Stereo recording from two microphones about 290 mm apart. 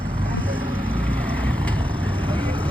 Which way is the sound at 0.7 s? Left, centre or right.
Centre.